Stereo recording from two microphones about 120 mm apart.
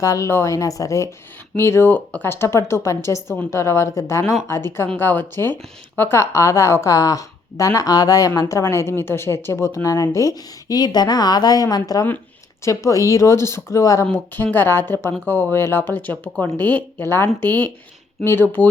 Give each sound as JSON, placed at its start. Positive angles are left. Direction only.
{"t": 0.0, "sound": "a woman's voice", "side_deg": 25}